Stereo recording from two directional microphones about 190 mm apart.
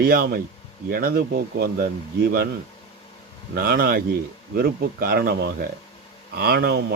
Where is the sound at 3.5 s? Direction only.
50° right (ahead or behind).